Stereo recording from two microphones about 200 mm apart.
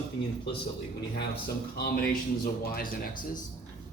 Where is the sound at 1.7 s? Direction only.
50° left (ahead or behind).